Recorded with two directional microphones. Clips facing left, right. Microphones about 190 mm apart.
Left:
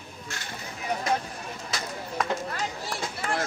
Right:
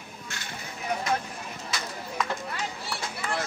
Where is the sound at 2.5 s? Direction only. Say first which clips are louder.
Left 2 dB; 45° left (ahead or behind).